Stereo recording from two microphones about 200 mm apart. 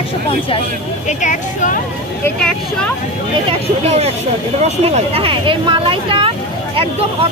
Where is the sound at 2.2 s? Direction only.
5° left (ahead or behind).